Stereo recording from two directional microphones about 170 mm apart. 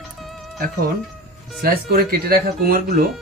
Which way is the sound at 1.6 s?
65° right (ahead or behind).